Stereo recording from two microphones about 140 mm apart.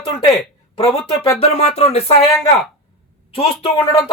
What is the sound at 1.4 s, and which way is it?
Speech, 45° left (ahead or behind).